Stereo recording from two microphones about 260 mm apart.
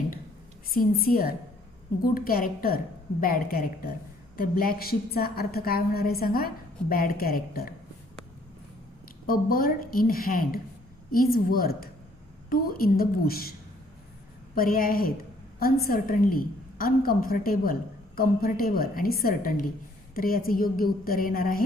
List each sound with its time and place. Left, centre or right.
0.7 s a woman's voice: left
9.2 s a woman's voice: left
14.5 s a woman's voice: left